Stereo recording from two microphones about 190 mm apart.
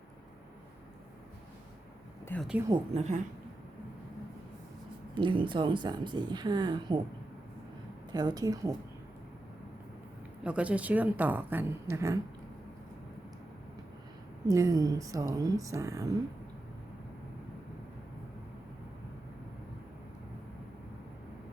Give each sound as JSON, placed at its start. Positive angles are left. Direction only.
{"t": 2.2, "sound": "speech", "side_deg": 10}
{"t": 2.9, "sound": "a woman's voice", "side_deg": -35}
{"t": 5.1, "sound": "speech", "side_deg": -25}
{"t": 8.1, "sound": "speech", "side_deg": -20}
{"t": 10.4, "sound": "a woman's voice", "side_deg": -5}
{"t": 14.4, "sound": "a woman's voice", "side_deg": -20}